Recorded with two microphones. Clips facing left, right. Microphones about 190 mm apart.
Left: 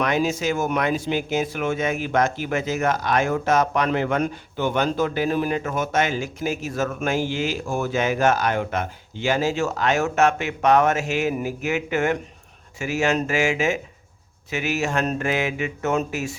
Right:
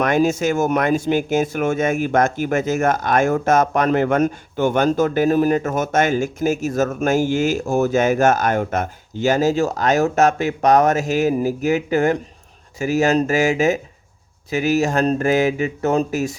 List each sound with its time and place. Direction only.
0.0 s speech: 50° right (ahead or behind)